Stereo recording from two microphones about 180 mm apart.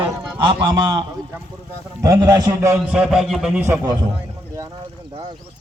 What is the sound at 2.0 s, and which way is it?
Speech, 20° right (ahead or behind).